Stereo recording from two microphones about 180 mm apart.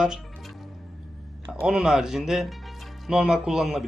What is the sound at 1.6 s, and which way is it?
Speech, 5° right (ahead or behind).